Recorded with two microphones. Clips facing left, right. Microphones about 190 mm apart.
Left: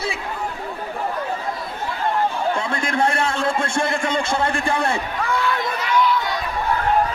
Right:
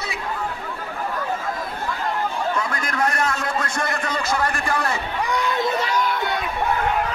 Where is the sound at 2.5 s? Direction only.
25° left (ahead or behind).